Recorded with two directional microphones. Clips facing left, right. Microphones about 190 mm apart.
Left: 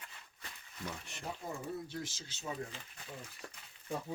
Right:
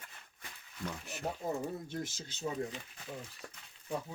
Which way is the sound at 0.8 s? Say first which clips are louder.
Right 3 dB; centre (ahead or behind).